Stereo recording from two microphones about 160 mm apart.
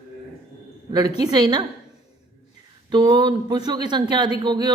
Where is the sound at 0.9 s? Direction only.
25° right (ahead or behind).